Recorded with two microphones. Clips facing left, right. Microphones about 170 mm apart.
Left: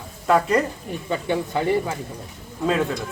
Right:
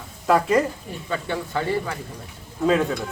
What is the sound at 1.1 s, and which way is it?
Speech, 20° left (ahead or behind).